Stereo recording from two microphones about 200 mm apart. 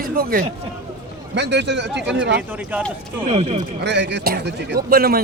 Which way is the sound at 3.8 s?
60° right (ahead or behind).